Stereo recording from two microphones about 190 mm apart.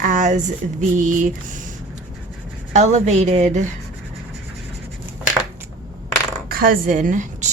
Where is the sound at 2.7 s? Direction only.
35° right (ahead or behind).